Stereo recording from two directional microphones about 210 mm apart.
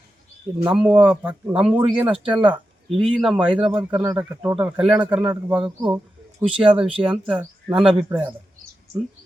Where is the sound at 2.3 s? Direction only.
25° right (ahead or behind).